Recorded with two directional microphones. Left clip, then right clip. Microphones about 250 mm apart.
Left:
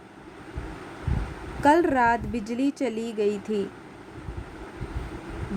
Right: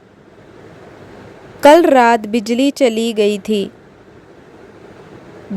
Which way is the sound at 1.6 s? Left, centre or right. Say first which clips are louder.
Right 12 dB; right.